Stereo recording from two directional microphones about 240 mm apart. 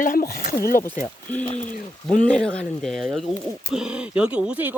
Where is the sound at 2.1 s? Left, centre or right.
Centre.